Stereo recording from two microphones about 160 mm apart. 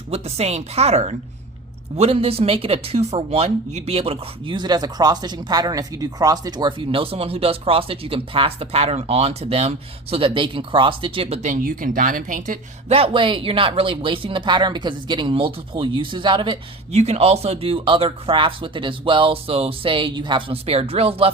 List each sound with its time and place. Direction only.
0.1 s speech: 40° right (ahead or behind); by 12.5 s 55° right (ahead or behind)
12.9 s speech: 35° right (ahead or behind)
17.0 s speech: 40° right (ahead or behind)